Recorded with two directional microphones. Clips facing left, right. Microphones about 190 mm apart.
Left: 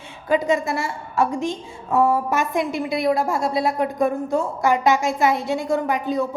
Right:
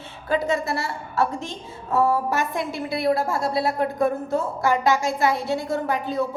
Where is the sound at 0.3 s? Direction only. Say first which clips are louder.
Left 3 dB; 15° left (ahead or behind).